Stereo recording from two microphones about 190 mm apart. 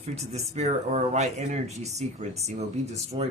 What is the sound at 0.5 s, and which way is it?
Speech, 35° right (ahead or behind).